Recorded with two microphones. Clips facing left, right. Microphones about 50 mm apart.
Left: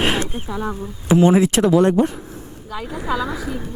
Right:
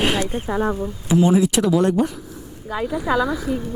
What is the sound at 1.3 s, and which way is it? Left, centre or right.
Speech, left.